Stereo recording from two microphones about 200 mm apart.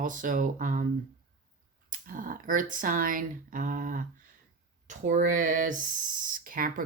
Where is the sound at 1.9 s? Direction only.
45° right (ahead or behind).